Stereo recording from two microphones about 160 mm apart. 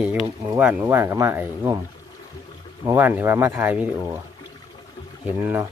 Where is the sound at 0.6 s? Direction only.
10° right (ahead or behind).